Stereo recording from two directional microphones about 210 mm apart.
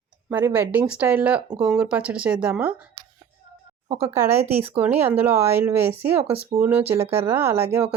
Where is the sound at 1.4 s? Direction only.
25° right (ahead or behind).